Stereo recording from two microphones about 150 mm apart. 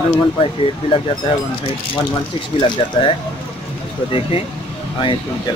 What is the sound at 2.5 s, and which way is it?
Speech, 30° left (ahead or behind).